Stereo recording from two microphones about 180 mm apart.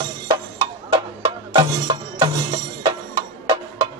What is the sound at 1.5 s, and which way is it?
Music, 25° right (ahead or behind).